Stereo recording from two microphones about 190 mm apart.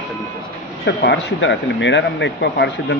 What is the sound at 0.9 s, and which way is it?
Speech, 65° left (ahead or behind).